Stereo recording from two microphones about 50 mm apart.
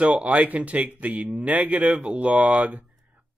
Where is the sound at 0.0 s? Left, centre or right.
Right.